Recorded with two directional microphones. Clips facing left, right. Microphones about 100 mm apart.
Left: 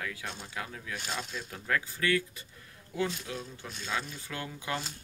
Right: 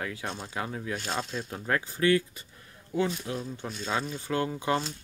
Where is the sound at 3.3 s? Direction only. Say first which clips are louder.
Right 6 dB; 35° right (ahead or behind).